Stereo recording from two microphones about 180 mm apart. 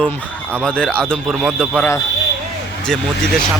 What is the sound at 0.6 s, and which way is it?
A man's voice, 5° left (ahead or behind).